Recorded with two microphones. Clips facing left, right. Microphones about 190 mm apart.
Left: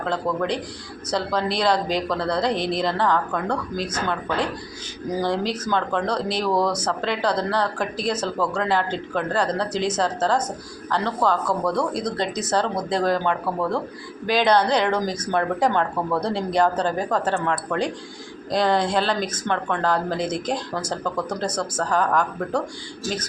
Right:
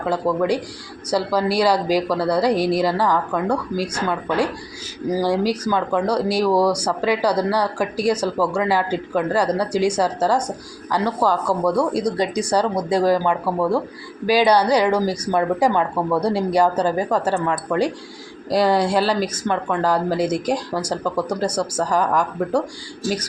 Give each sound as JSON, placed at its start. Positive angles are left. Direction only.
{"t": 0.0, "sound": "speech", "side_deg": -10}